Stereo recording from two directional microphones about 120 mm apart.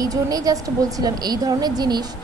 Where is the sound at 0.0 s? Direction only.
30° right (ahead or behind).